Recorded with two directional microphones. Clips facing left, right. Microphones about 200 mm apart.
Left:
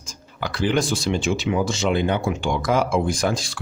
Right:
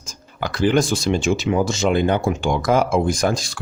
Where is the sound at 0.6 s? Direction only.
45° right (ahead or behind).